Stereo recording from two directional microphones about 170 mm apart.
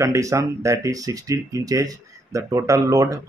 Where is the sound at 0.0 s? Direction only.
20° right (ahead or behind).